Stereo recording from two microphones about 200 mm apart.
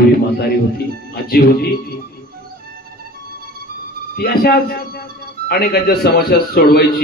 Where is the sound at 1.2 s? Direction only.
50° left (ahead or behind).